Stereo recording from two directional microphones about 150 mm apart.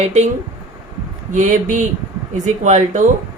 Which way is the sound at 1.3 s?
55° right (ahead or behind).